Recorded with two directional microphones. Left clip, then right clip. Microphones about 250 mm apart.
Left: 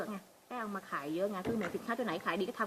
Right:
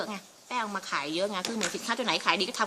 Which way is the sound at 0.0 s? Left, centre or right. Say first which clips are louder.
Right 6 dB; centre.